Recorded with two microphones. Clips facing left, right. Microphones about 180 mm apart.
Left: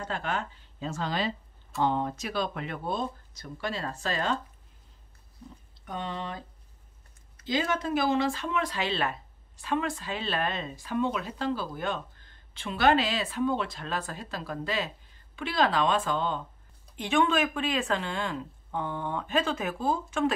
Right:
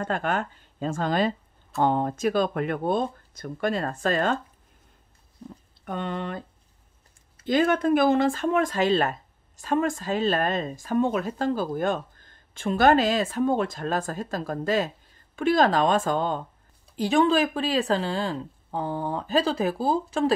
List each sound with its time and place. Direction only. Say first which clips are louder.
0.0 s speech: right 6 dB; 50° right (ahead or behind)
5.9 s speech: right 5 dB; 55° right (ahead or behind)
7.4 s speech: right 8 dB; 55° right (ahead or behind)
16.9 s speech: right 5 dB; 35° right (ahead or behind)